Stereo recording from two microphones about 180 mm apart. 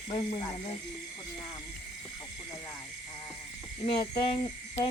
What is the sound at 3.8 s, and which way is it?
Speech, 30° left (ahead or behind).